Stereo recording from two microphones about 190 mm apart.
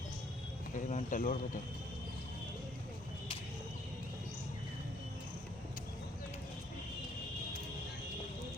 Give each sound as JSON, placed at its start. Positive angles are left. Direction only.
{"t": 0.9, "sound": "a man's voice", "side_deg": 40}